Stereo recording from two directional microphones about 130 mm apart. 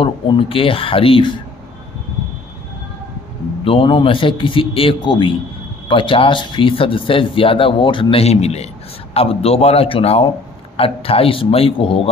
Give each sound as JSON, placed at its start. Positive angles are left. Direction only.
{"t": 0.0, "sound": "speech", "side_deg": 45}
{"t": 3.6, "sound": "a man's voice", "side_deg": 45}